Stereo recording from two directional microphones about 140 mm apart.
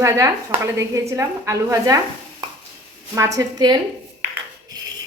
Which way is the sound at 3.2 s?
25° right (ahead or behind).